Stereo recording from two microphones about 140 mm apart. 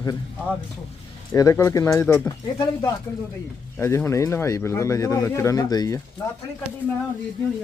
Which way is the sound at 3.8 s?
20° left (ahead or behind).